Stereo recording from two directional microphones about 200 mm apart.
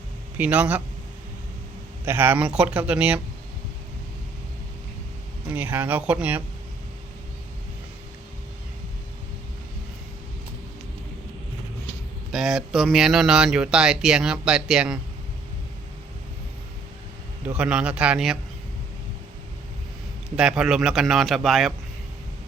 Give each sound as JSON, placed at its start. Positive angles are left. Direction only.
{"t": 0.3, "sound": "speech", "side_deg": -10}
{"t": 2.0, "sound": "speech", "side_deg": -10}
{"t": 5.5, "sound": "speech", "side_deg": -10}
{"t": 12.3, "sound": "speech", "side_deg": 0}
{"t": 17.4, "sound": "speech", "side_deg": -5}
{"t": 20.3, "sound": "speech", "side_deg": -5}